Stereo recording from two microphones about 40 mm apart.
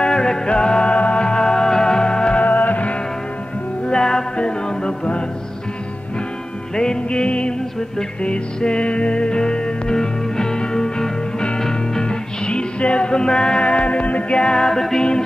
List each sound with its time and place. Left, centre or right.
0.0 s music: centre
2.4 s music: left
3.8 s music: centre
6.7 s music: centre